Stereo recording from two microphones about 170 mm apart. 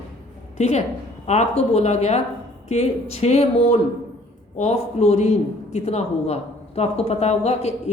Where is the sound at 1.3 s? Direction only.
40° left (ahead or behind).